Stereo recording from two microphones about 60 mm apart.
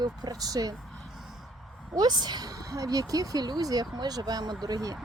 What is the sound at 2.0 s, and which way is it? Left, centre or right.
Speech, right.